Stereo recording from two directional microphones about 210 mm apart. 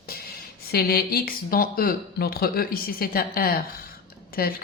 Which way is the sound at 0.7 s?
45° left (ahead or behind).